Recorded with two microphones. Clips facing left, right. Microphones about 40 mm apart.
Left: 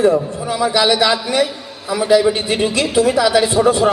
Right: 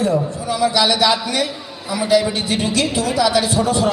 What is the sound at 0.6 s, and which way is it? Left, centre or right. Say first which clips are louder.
A man's voice: left 1 dB; left.